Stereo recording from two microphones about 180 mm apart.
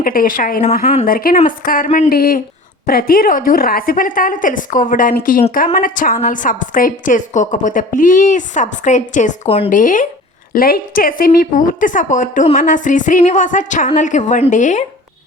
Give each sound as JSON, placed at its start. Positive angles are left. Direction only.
{"t": 0.0, "sound": "a woman's voice", "side_deg": 50}